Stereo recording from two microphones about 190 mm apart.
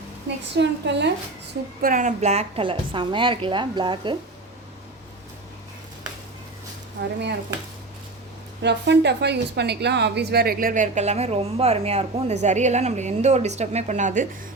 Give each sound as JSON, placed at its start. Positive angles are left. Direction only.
{"t": 0.5, "sound": "a woman's voice", "side_deg": -65}
{"t": 1.8, "sound": "a woman's voice", "side_deg": -45}
{"t": 7.0, "sound": "a woman's voice", "side_deg": -65}
{"t": 8.6, "sound": "speech", "side_deg": -65}